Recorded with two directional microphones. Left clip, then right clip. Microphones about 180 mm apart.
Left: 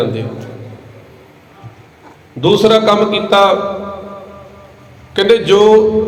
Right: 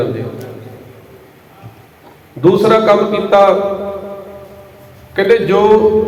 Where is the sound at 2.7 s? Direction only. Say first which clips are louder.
Even; 35° left (ahead or behind).